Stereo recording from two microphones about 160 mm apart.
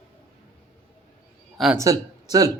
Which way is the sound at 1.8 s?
20° right (ahead or behind).